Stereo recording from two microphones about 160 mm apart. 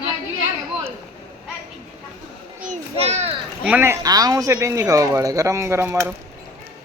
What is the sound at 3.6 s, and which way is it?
Speech, 10° right (ahead or behind).